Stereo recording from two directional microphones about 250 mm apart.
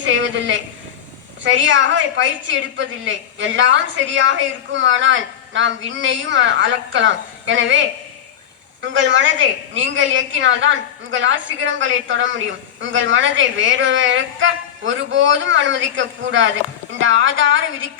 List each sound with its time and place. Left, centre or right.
0.0 s a woman's voice: right